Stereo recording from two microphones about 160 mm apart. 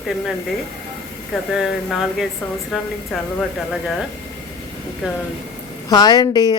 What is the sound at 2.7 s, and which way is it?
Speech, centre (ahead or behind).